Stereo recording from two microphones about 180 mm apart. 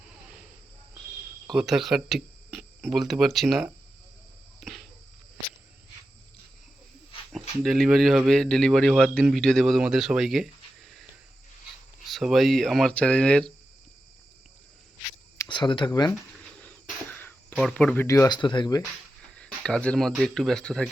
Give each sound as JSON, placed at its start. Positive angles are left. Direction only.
{"t": 1.5, "sound": "speech", "side_deg": 0}
{"t": 4.6, "sound": "cricket", "side_deg": 0}
{"t": 7.6, "sound": "speech", "side_deg": 0}
{"t": 12.1, "sound": "speech", "side_deg": 0}
{"t": 15.4, "sound": "speech", "side_deg": 25}
{"t": 16.6, "sound": "a sound", "side_deg": 10}
{"t": 19.3, "sound": "speech", "side_deg": 5}